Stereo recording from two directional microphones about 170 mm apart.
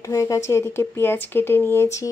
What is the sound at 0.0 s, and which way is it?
Speech, 20° left (ahead or behind).